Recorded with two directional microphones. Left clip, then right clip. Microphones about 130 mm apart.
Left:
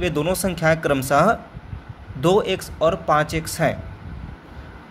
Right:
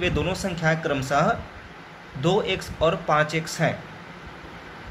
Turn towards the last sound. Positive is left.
turn(degrees=75)  # may be behind; listen again after turning